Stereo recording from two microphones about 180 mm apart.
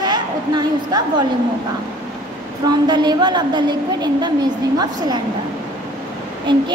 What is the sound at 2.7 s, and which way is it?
A woman's voice, 25° right (ahead or behind).